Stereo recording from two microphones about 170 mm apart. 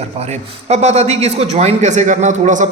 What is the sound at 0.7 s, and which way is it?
A man's voice, 40° right (ahead or behind).